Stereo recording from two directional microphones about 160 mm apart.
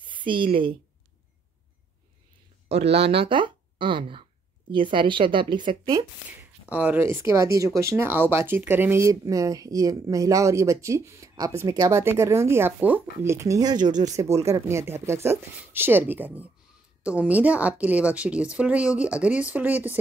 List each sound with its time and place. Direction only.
0.0 s a woman's voice: 30° right (ahead or behind)
2.7 s speech: 40° right (ahead or behind)
6.7 s a woman's voice: 10° right (ahead or behind)